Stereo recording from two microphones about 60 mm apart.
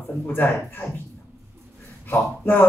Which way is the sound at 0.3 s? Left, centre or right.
Left.